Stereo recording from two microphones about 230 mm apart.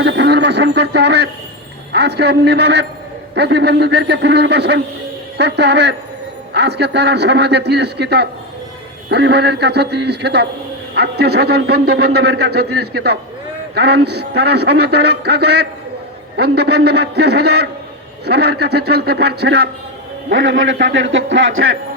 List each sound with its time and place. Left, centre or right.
0.0 s a man's voice: right
16.4 s a man's voice: right